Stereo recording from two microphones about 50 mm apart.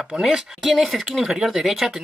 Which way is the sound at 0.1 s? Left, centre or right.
Centre.